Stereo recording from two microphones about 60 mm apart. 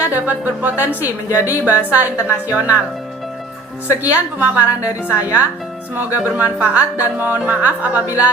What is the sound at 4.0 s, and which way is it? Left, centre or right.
A woman's voice, right.